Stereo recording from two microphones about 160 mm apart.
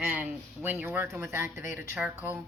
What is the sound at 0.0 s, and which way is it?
A woman's voice, 10° right (ahead or behind).